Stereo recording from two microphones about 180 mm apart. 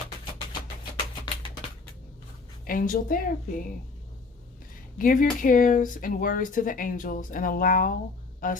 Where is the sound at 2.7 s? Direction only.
50° left (ahead or behind).